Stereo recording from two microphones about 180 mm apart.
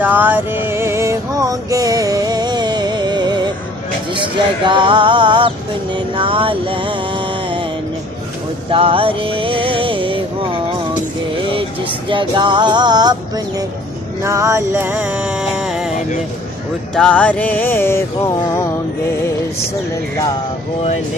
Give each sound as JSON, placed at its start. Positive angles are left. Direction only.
{"t": 0.0, "sound": "music", "side_deg": -10}
{"t": 4.1, "sound": "a sound", "side_deg": -25}
{"t": 5.9, "sound": "music", "side_deg": -30}
{"t": 8.7, "sound": "music", "side_deg": -30}
{"t": 12.0, "sound": "a sound", "side_deg": -25}
{"t": 14.3, "sound": "music", "side_deg": -15}
{"t": 16.9, "sound": "music", "side_deg": 5}